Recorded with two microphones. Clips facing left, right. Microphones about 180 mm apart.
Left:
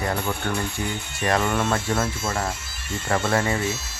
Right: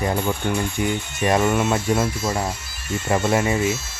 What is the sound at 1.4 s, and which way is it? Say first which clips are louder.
Speech: right 4 dB; 10° right (ahead or behind).